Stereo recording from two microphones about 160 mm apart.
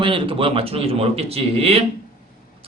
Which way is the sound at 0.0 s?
35° right (ahead or behind).